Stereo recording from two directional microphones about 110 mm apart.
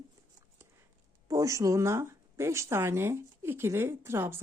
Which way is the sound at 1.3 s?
30° right (ahead or behind).